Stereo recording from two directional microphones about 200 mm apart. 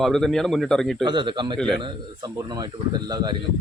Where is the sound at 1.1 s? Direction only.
20° right (ahead or behind).